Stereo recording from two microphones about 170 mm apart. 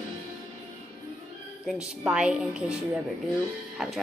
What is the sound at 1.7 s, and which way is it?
A woman's voice, 5° right (ahead or behind).